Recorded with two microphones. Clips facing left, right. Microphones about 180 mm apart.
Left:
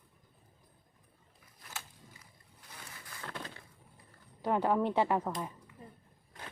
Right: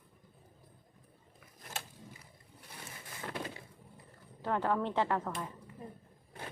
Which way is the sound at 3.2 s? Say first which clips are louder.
Right 3 dB; 15° right (ahead or behind).